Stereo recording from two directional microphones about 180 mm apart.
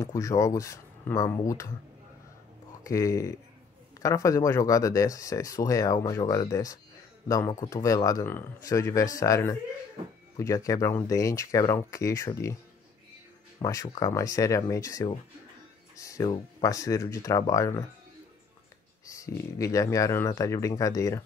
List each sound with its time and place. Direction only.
0.0 s speech: 15° left (ahead or behind)
2.8 s speech: 15° left (ahead or behind)
13.6 s speech: 20° left (ahead or behind)
19.1 s speech: 15° left (ahead or behind)